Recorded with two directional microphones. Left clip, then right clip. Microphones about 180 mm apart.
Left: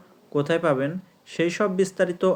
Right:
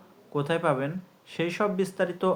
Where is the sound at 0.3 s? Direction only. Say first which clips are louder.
Left 4 dB; 25° left (ahead or behind).